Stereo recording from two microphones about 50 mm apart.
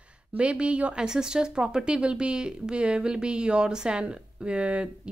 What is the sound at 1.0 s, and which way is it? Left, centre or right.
Speech, centre.